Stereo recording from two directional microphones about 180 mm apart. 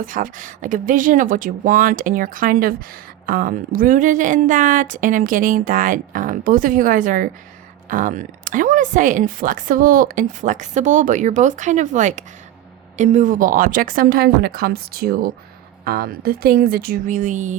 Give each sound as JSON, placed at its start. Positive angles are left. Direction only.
{"t": 0.0, "sound": "speech", "side_deg": -45}